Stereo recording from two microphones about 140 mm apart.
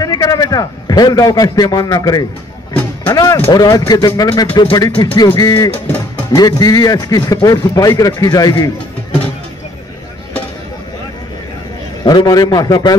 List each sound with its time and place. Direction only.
0.0 s a man's voice: 25° left (ahead or behind)
5.9 s speech: 15° left (ahead or behind)
6.3 s a man's voice: 25° left (ahead or behind)
12.0 s a man's voice: 30° left (ahead or behind)